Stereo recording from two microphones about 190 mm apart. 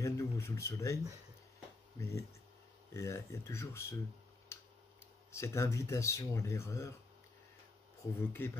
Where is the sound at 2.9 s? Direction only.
15° left (ahead or behind).